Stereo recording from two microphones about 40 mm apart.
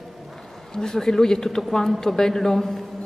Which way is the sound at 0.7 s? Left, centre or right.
Centre.